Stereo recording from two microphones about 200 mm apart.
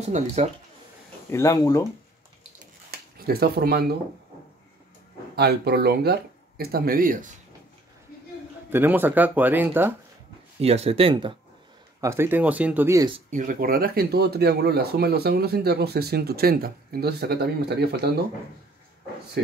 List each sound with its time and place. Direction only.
0.0 s speech: 35° right (ahead or behind)
1.3 s speech: 15° left (ahead or behind)
2.9 s a sound: 50° right (ahead or behind)
5.3 s speech: 55° right (ahead or behind)
8.6 s speech: 10° right (ahead or behind)
10.6 s speech: 30° right (ahead or behind)
12.0 s speech: 15° right (ahead or behind)
13.3 s speech: 40° right (ahead or behind)
19.4 s speech: 55° right (ahead or behind)